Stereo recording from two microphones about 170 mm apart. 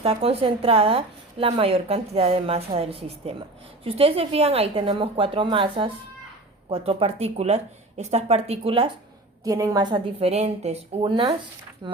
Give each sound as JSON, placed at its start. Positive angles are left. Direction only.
{"t": 0.0, "sound": "a woman's voice", "side_deg": -35}
{"t": 9.4, "sound": "a woman's voice", "side_deg": -20}